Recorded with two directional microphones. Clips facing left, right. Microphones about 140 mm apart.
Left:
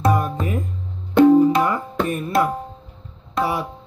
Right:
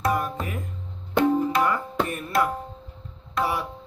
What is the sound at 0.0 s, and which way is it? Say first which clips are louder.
Music: left 5 dB; 20° left (ahead or behind).